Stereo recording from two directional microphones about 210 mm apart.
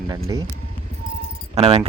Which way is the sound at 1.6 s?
30° right (ahead or behind).